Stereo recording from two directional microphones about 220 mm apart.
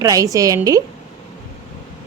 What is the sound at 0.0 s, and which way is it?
Speech, 15° right (ahead or behind).